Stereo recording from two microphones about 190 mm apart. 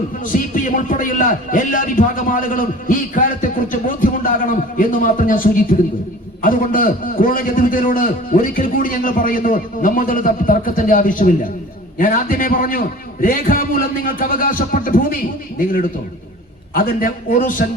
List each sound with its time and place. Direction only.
0.2 s speech: 45° left (ahead or behind)